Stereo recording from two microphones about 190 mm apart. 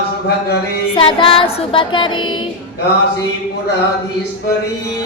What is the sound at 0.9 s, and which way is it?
Child singing, 25° left (ahead or behind).